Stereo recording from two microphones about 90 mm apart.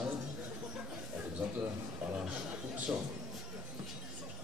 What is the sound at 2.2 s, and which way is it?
Speech, 5° right (ahead or behind).